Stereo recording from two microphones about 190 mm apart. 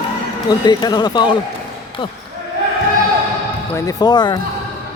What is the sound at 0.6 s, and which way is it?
Speech, 20° left (ahead or behind).